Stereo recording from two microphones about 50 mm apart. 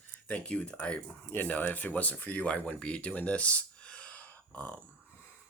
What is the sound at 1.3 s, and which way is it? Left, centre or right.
Speech, left.